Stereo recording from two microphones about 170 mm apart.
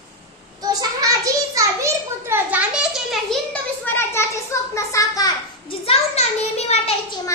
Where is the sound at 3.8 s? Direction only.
10° left (ahead or behind).